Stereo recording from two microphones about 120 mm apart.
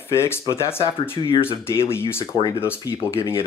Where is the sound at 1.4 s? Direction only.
20° left (ahead or behind).